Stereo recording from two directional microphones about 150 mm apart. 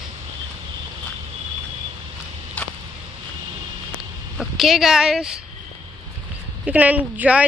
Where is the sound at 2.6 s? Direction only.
10° left (ahead or behind).